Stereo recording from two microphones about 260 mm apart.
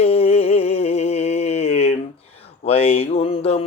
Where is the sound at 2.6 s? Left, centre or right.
Left.